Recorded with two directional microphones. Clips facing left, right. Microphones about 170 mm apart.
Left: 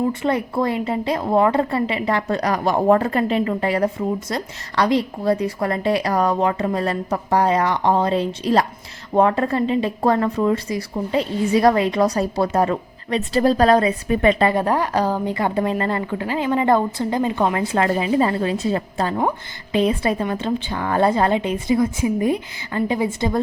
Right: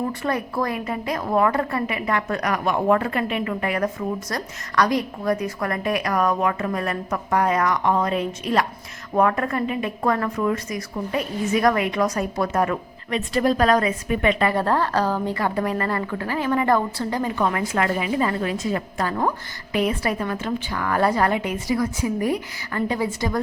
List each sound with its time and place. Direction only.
0.1 s a woman's voice: 25° left (ahead or behind)
14.5 s a woman's voice: 15° left (ahead or behind)